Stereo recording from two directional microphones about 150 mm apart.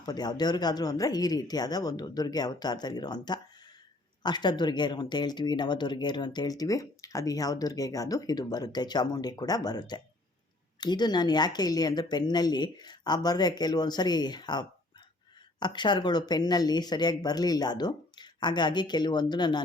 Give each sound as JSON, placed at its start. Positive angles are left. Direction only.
{"t": 0.0, "sound": "speech", "side_deg": 25}